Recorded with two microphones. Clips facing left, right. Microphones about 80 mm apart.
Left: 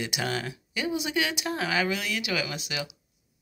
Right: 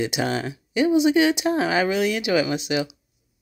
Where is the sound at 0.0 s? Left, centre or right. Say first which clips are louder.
Right 6 dB; right.